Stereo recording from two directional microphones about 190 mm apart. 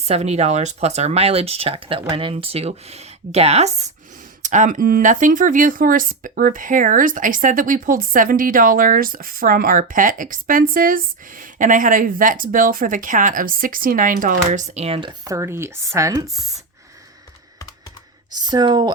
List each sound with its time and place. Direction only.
0.1 s speech: 35° right (ahead or behind)
15.2 s speech: 15° right (ahead or behind)
18.3 s speech: 20° right (ahead or behind)